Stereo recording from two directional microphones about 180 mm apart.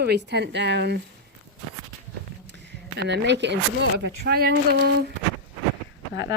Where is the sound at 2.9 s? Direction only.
70° right (ahead or behind).